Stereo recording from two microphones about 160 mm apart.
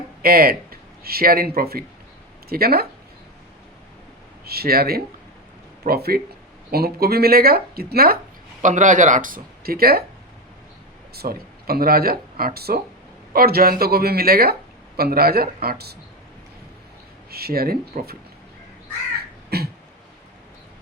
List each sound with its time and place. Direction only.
0.2 s speech: 65° right (ahead or behind)
4.4 s speech: 75° right (ahead or behind)
8.6 s speech: 50° right (ahead or behind); by 10.0 s 70° right (ahead or behind)
11.1 s speech: 75° right (ahead or behind)
17.3 s speech: 70° right (ahead or behind)
19.5 s beatboxing: 85° right